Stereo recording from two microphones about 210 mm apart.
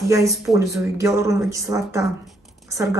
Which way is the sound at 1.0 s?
15° right (ahead or behind).